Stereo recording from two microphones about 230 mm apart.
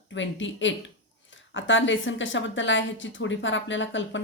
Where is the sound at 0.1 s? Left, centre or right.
Left.